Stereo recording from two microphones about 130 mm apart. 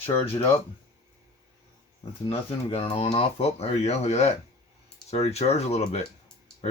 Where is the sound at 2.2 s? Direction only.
50° left (ahead or behind).